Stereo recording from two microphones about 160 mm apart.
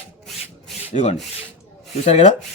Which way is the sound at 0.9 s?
45° left (ahead or behind).